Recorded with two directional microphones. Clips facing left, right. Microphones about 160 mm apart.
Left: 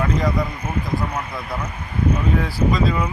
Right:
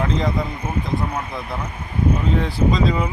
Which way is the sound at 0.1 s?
25° right (ahead or behind).